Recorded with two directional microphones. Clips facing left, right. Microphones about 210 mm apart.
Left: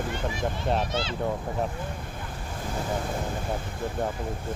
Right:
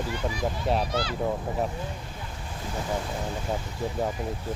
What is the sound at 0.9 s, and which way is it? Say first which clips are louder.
Speech: right 1 dB; 25° left (ahead or behind).